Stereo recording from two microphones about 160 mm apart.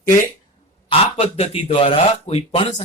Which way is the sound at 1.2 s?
40° left (ahead or behind).